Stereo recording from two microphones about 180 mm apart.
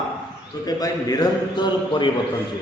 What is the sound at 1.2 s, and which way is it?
Speech, 25° left (ahead or behind).